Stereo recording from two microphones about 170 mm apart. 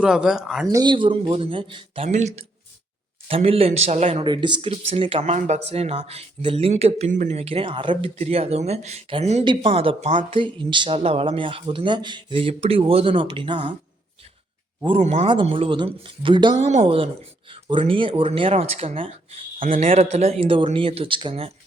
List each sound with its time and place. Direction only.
0.0 s speech: 5° right (ahead or behind)
0.7 s speech: 25° right (ahead or behind)
2.0 s speech: 40° right (ahead or behind)
14.8 s speech: 40° right (ahead or behind)
15.3 s speech: 30° right (ahead or behind)
19.5 s speech: 50° right (ahead or behind)
19.8 s speech: 35° right (ahead or behind)